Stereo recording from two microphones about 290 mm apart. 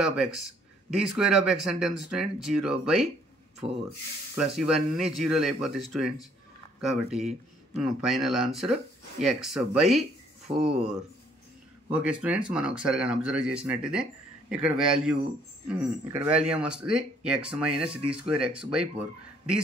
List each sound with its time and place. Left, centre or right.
0.0 s speech: centre
3.6 s speech: centre
4.6 s speech: centre
10.5 s speech: centre
11.9 s speech: centre